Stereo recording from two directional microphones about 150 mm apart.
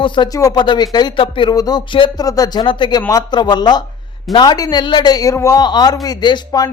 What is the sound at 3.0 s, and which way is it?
A man's voice, 20° left (ahead or behind).